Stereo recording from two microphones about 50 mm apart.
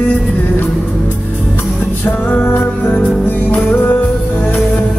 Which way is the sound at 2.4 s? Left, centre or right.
Left.